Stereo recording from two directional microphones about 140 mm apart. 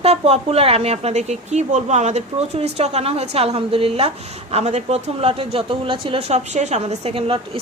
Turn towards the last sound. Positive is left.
turn(degrees=-45)  # may be behind; listen again after turning